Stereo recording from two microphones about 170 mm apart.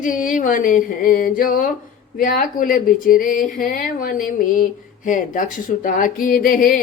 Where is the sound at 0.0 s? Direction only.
50° left (ahead or behind).